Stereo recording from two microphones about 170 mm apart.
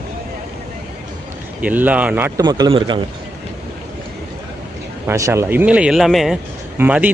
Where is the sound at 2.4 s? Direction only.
25° right (ahead or behind).